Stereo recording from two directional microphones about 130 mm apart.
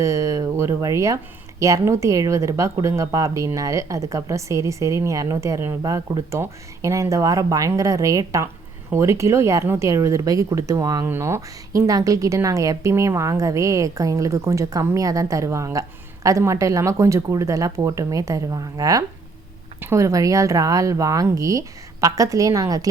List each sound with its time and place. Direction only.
0.0 s speech: 25° right (ahead or behind)